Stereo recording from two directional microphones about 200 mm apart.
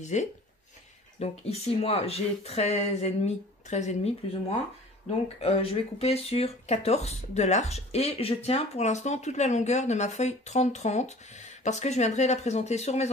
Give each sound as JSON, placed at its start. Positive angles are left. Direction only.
{"t": 0.0, "sound": "speech", "side_deg": 35}
{"t": 5.4, "sound": "speech", "side_deg": 30}